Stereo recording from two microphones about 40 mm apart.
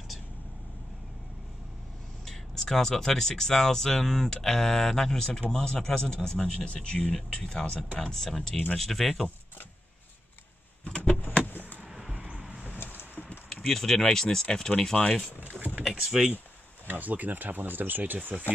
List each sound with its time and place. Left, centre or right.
2.2 s speech: centre
4.0 s speech: centre; by 8.0 s left
8.0 s speech: centre
11.1 s a sound: left
11.4 s vehicle: left
11.9 s vehicle: centre
12.3 s vehicle: right
12.7 s vehicle: left
13.5 s speech: centre
15.4 s vehicle: right
15.8 s power windows: centre
16.8 s speech: right